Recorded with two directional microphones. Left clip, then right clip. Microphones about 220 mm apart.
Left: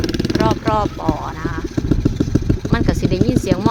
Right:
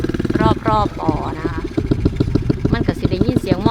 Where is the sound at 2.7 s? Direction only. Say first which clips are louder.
Left 5 dB; 10° left (ahead or behind).